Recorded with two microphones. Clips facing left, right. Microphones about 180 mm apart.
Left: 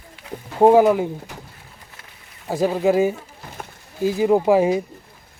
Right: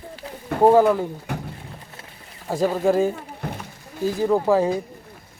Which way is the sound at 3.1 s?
60° right (ahead or behind).